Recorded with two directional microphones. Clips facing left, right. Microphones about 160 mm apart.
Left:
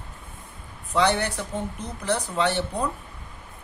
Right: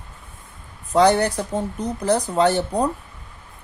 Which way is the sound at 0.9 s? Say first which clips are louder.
Right 6 dB; 40° right (ahead or behind).